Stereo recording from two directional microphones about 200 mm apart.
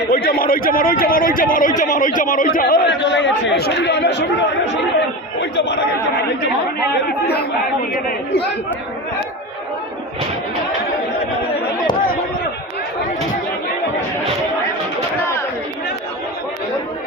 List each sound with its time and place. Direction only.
0.1 s a man's voice: 50° left (ahead or behind)
5.4 s chatter: 60° left (ahead or behind)